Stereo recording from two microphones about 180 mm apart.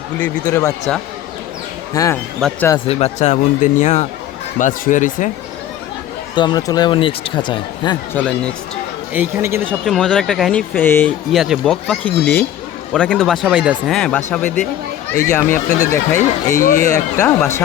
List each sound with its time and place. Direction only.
0.2 s speech: 15° left (ahead or behind)
1.9 s speech: 20° left (ahead or behind)
2.8 s speech: 35° left (ahead or behind)
6.3 s speech: 25° left (ahead or behind)
8.1 s speech: 5° left (ahead or behind)
9.1 s speech: 10° right (ahead or behind)
9.8 s speech: centre (ahead or behind)
10.8 s speech: 10° left (ahead or behind)
11.3 s speech: centre (ahead or behind)
15.3 s speech: 15° left (ahead or behind)
16.6 s speech: 50° left (ahead or behind)
16.9 s speech: 15° left (ahead or behind)